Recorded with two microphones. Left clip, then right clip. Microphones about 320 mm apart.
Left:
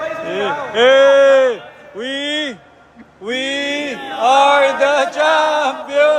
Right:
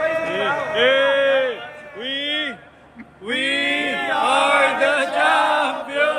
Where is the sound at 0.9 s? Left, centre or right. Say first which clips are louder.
Left 9 dB; centre.